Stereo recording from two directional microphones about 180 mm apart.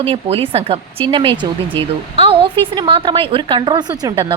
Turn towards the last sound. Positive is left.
turn(degrees=-25)  # may be behind; listen again after turning